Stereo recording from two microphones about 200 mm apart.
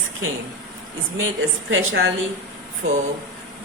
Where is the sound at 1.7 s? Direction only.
70° right (ahead or behind).